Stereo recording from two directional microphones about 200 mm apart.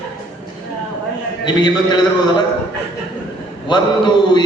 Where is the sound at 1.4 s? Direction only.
20° left (ahead or behind).